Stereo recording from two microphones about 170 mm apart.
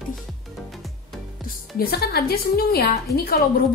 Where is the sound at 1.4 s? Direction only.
60° left (ahead or behind).